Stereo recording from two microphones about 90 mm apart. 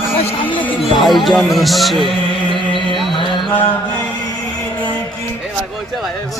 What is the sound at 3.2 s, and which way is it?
Mantra, 65° left (ahead or behind).